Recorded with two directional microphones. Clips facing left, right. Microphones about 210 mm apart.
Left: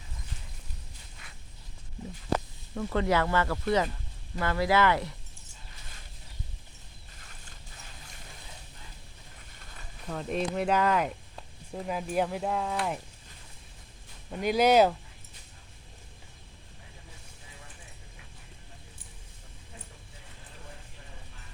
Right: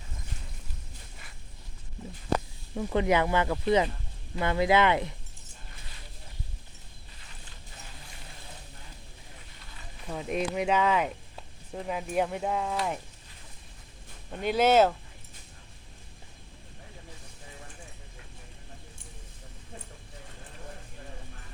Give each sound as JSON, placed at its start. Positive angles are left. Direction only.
{"t": 2.7, "sound": "speech", "side_deg": -15}
{"t": 10.1, "sound": "speech", "side_deg": -5}
{"t": 14.3, "sound": "speech", "side_deg": 5}